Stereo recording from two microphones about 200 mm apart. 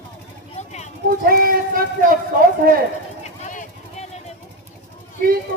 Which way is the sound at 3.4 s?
40° left (ahead or behind).